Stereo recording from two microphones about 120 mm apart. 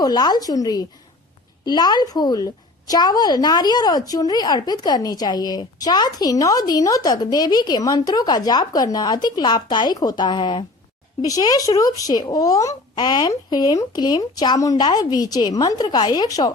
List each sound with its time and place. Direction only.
0.0 s a woman's voice: 35° left (ahead or behind)